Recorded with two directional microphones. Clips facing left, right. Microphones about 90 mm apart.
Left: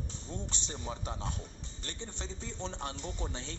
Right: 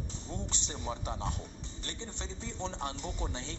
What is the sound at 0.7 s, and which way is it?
Speech, 25° right (ahead or behind).